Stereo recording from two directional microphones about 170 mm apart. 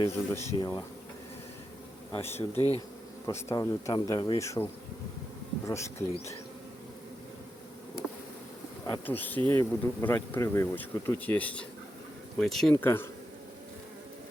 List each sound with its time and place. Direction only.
0.0 s speech: 20° left (ahead or behind)
2.1 s speech: 15° left (ahead or behind)
2.6 s bee: 25° right (ahead or behind)
3.2 s speech: 20° left (ahead or behind)
8.9 s speech: 10° left (ahead or behind)
12.7 s speech: 15° left (ahead or behind)